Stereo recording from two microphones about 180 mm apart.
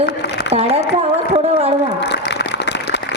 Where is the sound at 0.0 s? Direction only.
70° left (ahead or behind).